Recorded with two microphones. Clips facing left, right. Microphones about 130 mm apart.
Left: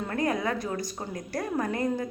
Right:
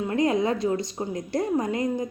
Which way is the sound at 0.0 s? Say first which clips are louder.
Right 5 dB; 20° right (ahead or behind).